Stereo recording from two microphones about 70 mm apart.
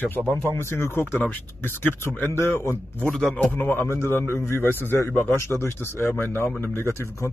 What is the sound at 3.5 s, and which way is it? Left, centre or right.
A man's voice, left.